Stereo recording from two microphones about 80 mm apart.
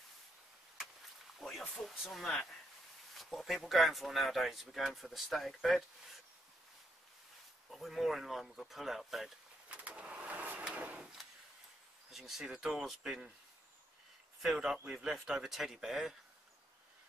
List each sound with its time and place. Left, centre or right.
1.4 s a sound: centre
1.9 s speech: centre
7.7 s speech: centre
9.7 s a sound: centre
12.1 s speech: centre
14.4 s speech: centre